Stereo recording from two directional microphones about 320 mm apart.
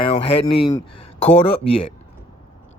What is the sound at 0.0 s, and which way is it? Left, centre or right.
Speech, centre.